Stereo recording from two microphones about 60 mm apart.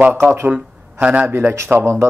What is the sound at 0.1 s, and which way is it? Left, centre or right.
Speech, right.